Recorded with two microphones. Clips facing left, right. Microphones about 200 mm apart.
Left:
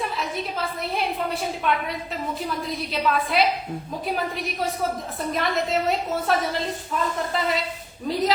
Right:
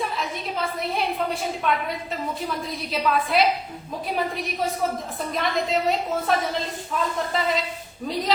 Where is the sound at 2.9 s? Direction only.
Centre (ahead or behind).